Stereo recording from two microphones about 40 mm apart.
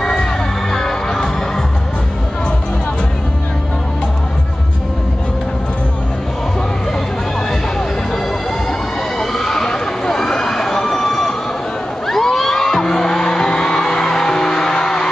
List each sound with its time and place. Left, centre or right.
0.0 s music: left
0.7 s music: centre
9.2 s emergency vehicle: centre
12.1 s music: centre